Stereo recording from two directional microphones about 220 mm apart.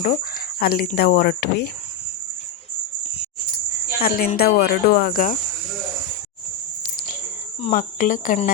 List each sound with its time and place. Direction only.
0.0 s speech: 35° left (ahead or behind)
4.0 s speech: 40° left (ahead or behind)
7.6 s speech: 35° left (ahead or behind)